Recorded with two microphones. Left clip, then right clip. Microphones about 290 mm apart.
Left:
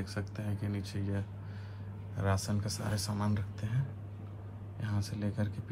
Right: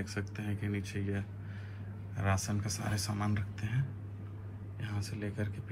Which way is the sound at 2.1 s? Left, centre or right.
Centre.